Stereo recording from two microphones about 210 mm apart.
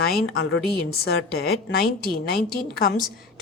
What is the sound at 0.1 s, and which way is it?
A woman's voice, 55° left (ahead or behind).